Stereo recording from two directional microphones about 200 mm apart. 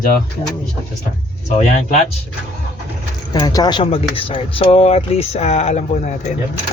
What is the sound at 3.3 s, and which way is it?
Speech, 20° left (ahead or behind).